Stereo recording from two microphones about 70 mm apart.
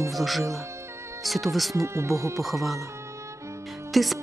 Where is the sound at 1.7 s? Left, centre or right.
Right.